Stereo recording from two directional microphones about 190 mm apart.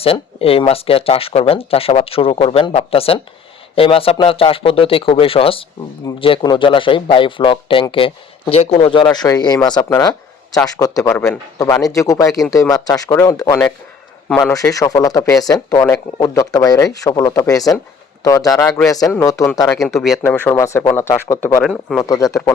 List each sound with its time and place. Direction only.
0.0 s speech: 30° left (ahead or behind)
19.9 s speech: centre (ahead or behind)
20.2 s speech: 10° left (ahead or behind)
21.6 s speech: centre (ahead or behind)
22.0 s speech: 15° left (ahead or behind)